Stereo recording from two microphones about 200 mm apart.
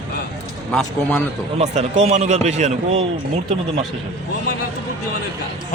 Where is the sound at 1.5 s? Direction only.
35° right (ahead or behind).